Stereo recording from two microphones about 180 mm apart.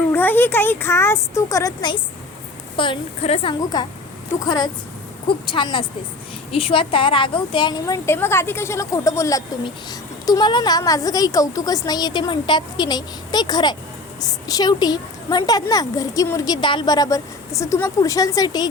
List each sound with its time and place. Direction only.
0.1 s a woman's voice: 10° left (ahead or behind)